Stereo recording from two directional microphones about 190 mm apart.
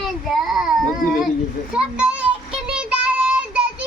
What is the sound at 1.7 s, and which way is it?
Child singing, 5° right (ahead or behind).